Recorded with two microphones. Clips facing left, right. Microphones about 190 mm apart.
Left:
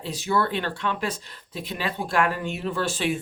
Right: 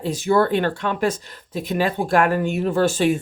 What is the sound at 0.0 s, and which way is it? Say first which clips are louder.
Speech: right 7 dB; 50° right (ahead or behind).